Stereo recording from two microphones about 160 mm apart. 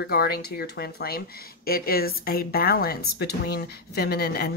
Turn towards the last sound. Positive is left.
turn(degrees=75)  # may be behind; listen again after turning